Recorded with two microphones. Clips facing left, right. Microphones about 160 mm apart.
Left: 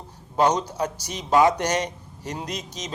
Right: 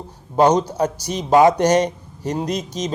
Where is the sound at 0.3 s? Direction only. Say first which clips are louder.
Right 6 dB; 35° right (ahead or behind).